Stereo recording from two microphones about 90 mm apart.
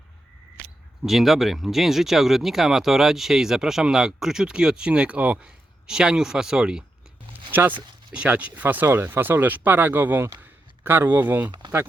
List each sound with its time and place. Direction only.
1.0 s speech: centre (ahead or behind)
8.1 s speech: 15° right (ahead or behind)